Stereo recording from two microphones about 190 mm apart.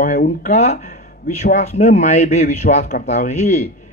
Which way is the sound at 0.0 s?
40° left (ahead or behind).